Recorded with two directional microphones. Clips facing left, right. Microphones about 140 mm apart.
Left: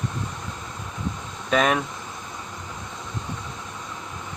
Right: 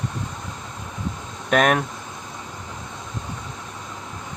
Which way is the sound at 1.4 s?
65° right (ahead or behind).